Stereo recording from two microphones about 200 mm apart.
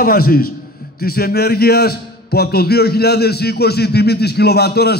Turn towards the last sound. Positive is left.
turn(degrees=55)  # may be behind; listen again after turning